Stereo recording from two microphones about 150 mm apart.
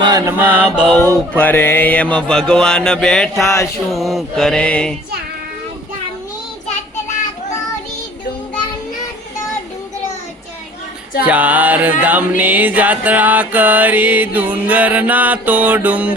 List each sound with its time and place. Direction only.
0.3 s music: 10° right (ahead or behind)
1.0 s music: 20° right (ahead or behind)
1.4 s music: 15° left (ahead or behind)
3.4 s a sound: 20° left (ahead or behind)
3.8 s music: centre (ahead or behind)
11.2 s music: 10° right (ahead or behind)